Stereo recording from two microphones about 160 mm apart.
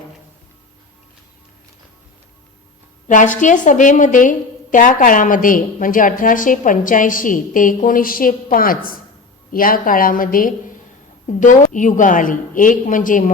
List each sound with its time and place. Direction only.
3.1 s a woman's voice: 55° left (ahead or behind)